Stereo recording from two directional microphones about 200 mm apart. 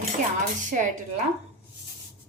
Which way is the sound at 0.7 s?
40° right (ahead or behind).